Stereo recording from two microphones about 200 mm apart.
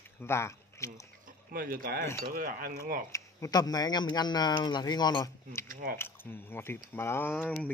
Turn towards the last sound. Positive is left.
turn(degrees=10)  # may be behind; listen again after turning